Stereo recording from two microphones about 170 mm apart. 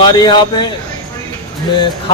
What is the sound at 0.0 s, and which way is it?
Speech, 25° left (ahead or behind).